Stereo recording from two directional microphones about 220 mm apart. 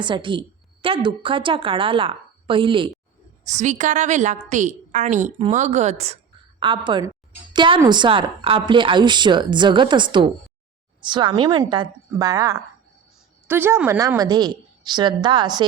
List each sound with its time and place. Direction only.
0.0 s a woman's voice: 20° right (ahead or behind)
3.5 s a woman's voice: 35° right (ahead or behind)